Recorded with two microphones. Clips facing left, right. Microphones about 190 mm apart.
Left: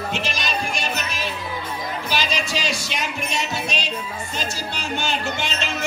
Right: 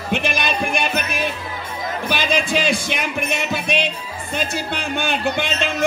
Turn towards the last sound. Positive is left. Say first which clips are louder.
# right 5 dB
turn(degrees=-55)  # may be behind; listen again after turning